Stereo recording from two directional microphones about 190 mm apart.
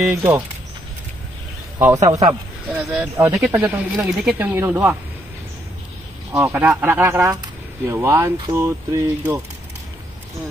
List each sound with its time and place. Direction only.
0.0 s speech: 10° right (ahead or behind)
2.0 s a man's voice: 35° right (ahead or behind)
2.7 s speech: 5° right (ahead or behind)
6.3 s speech: 10° right (ahead or behind)